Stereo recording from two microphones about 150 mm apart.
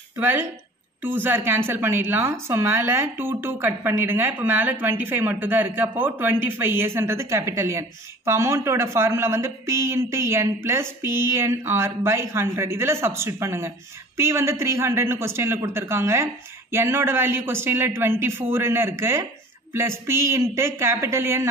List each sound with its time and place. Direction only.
0.1 s a woman's voice: 15° right (ahead or behind)